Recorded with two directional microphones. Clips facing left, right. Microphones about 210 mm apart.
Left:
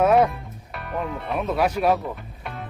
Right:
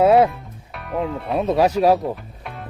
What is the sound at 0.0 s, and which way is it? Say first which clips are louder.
Music: right 4 dB; 30° right (ahead or behind).